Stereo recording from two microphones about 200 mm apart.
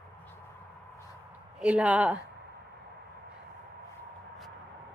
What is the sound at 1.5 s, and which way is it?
Speech, 5° right (ahead or behind).